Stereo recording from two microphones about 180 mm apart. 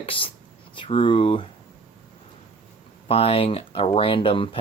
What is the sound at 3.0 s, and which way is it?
Speech, 30° left (ahead or behind).